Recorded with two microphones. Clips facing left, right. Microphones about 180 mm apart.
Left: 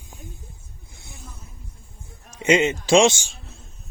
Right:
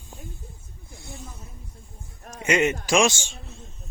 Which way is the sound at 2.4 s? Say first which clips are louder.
Left 3 dB; 25° left (ahead or behind).